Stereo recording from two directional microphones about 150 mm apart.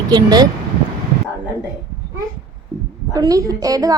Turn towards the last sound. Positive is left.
turn(degrees=-25)  # may be behind; listen again after turning